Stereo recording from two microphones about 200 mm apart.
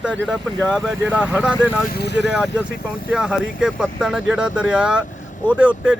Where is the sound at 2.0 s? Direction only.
60° left (ahead or behind).